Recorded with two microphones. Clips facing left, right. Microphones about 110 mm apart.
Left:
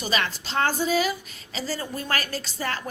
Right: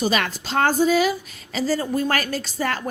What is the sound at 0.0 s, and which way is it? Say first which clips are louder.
Speech: right 5 dB; 45° right (ahead or behind).